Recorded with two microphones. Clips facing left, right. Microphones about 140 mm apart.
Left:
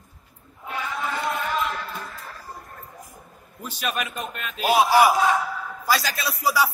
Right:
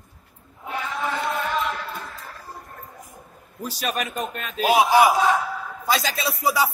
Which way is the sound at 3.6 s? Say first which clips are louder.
Right 2 dB; 40° right (ahead or behind).